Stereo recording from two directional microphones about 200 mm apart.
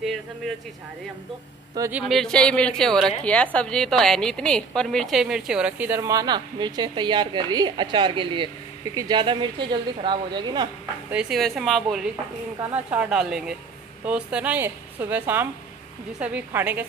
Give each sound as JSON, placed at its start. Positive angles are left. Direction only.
{"t": 1.8, "sound": "a woman's voice", "side_deg": -10}
{"t": 11.1, "sound": "a woman's voice", "side_deg": -5}